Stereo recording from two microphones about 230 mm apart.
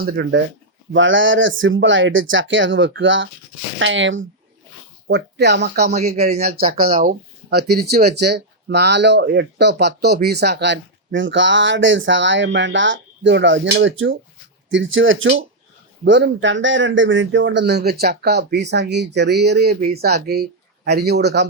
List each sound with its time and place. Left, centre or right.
0.0 s speech: right
0.9 s speech: right
5.9 s speech: right